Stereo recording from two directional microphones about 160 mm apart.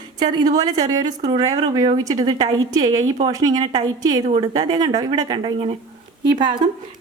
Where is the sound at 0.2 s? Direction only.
25° right (ahead or behind).